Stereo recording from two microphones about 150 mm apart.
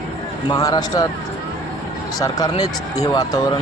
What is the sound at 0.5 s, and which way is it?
Speech, 25° left (ahead or behind).